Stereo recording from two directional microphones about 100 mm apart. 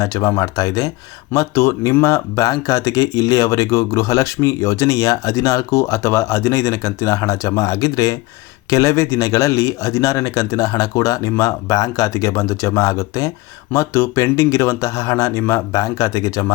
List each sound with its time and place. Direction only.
0.0 s speech: 35° left (ahead or behind)